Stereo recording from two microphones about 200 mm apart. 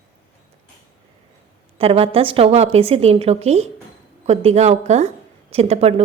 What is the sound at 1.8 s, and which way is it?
A woman's voice, 30° right (ahead or behind).